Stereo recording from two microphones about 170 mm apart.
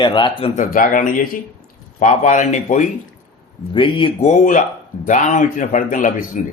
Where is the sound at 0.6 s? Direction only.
55° left (ahead or behind).